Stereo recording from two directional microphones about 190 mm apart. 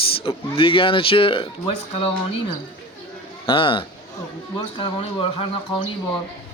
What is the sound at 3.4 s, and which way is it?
Speech, 30° left (ahead or behind).